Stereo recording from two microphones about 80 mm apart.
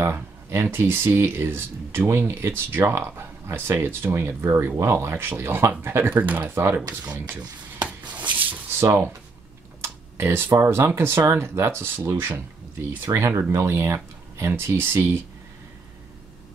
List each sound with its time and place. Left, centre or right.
0.0 s speech: right
8.4 s a sound: right
10.1 s speech: right